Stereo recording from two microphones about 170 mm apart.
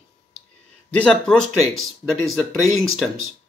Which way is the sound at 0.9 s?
5° left (ahead or behind).